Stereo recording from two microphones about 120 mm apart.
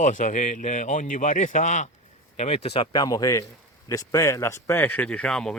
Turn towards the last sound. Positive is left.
turn(degrees=5)  # may be behind; listen again after turning